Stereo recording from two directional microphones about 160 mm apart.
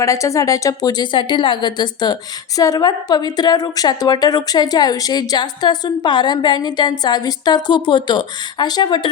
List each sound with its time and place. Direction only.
0.0 s a woman's voice: 20° left (ahead or behind)